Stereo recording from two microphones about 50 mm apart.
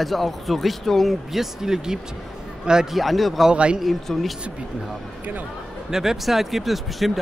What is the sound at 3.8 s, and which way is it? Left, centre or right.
Speech, centre.